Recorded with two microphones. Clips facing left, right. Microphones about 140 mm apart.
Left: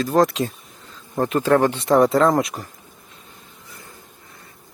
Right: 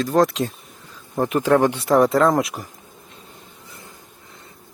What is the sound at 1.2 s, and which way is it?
Speech, 15° right (ahead or behind).